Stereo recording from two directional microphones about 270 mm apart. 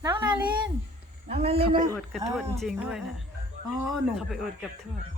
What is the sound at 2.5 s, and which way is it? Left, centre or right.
Speech, centre.